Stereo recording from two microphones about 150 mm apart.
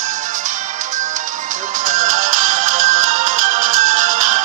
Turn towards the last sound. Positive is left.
turn(degrees=-55)  # may be behind; listen again after turning